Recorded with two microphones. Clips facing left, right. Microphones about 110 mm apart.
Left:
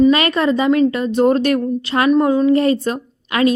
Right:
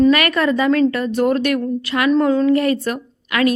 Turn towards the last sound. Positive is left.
turn(degrees=25)  # may be behind; listen again after turning